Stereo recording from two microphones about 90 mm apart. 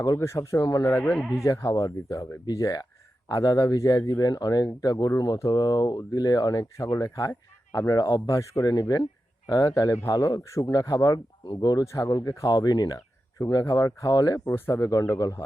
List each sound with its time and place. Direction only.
0.0 s speech: 35° left (ahead or behind)
1.0 s speech: 5° left (ahead or behind)
1.5 s speech: 35° left (ahead or behind)
8.7 s speech: 45° left (ahead or behind)
14.4 s speech: 30° left (ahead or behind)
14.8 s speech: 40° left (ahead or behind)